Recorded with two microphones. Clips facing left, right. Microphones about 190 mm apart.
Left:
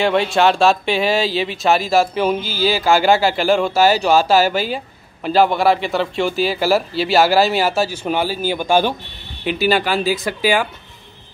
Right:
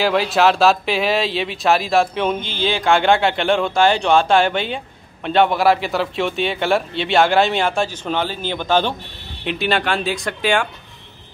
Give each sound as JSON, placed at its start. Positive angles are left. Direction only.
{"t": 0.0, "sound": "speech", "side_deg": 0}